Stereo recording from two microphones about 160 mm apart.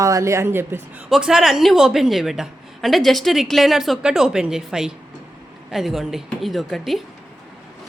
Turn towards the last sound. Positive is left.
turn(degrees=0)  # may be behind; listen again after turning